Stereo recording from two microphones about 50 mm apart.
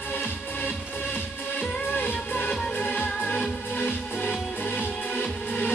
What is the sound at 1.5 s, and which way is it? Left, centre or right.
Music, left.